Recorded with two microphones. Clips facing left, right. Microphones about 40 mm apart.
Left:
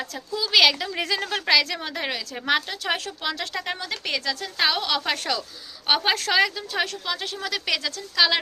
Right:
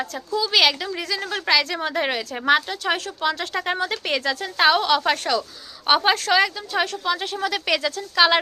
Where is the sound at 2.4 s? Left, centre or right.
Centre.